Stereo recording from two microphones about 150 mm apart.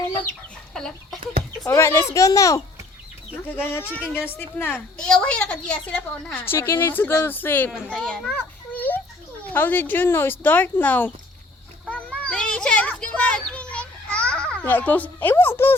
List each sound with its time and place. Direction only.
0.7 s chicken: 5° left (ahead or behind)
1.6 s a woman's voice: 15° left (ahead or behind)
11.9 s children playing: 10° left (ahead or behind)